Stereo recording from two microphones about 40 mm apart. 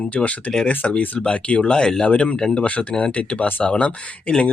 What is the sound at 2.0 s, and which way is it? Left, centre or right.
Speech, left.